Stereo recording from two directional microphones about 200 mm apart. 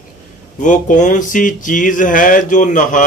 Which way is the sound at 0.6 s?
40° left (ahead or behind).